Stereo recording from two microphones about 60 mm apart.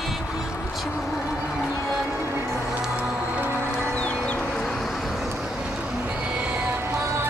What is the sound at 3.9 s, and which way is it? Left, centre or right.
Chicken, centre.